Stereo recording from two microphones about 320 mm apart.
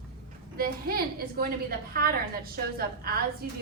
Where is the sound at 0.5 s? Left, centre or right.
Right.